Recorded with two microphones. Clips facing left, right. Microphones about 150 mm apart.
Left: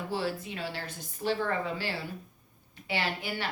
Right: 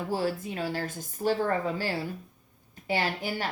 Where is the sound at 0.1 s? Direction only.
45° right (ahead or behind).